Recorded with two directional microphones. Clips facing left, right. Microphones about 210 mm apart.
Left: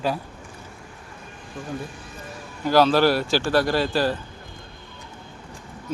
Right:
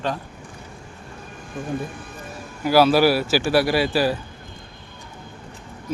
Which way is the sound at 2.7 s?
10° right (ahead or behind).